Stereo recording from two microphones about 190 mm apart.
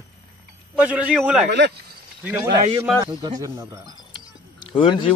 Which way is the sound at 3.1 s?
20° right (ahead or behind).